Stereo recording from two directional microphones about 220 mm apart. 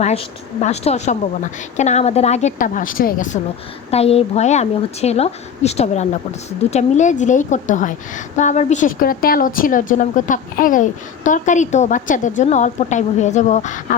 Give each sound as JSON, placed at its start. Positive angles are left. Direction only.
{"t": 0.0, "sound": "a woman's voice", "side_deg": 30}